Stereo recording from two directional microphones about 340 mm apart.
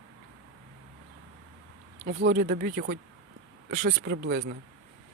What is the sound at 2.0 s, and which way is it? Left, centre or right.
Speech, right.